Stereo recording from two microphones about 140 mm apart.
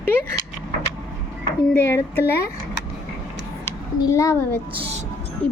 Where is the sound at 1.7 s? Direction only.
15° left (ahead or behind).